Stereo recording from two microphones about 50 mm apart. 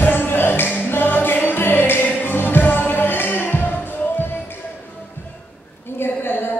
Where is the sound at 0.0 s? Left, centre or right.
Left.